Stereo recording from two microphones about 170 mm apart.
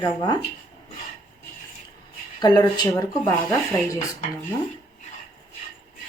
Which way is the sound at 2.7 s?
20° left (ahead or behind).